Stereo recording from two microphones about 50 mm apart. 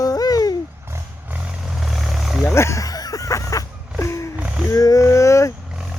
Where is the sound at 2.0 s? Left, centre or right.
Centre.